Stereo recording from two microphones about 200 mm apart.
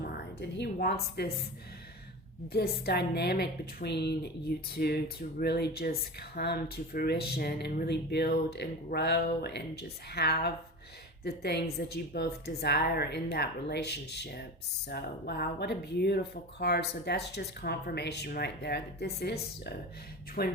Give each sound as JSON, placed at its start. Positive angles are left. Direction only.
{"t": 0.0, "sound": "a woman's voice", "side_deg": 55}
{"t": 2.5, "sound": "a woman's voice", "side_deg": 50}